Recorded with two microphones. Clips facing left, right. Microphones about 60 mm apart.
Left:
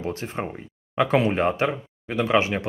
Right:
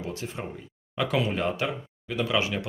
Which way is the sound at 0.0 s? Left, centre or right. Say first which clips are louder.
Left 5 dB; left.